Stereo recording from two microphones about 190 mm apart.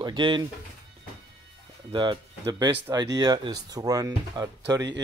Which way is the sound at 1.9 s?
25° right (ahead or behind).